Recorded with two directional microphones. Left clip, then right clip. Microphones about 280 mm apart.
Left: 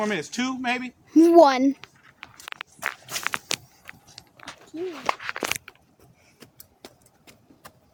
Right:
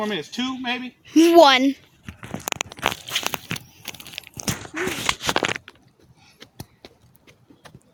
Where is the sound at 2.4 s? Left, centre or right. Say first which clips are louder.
Right 9 dB; right.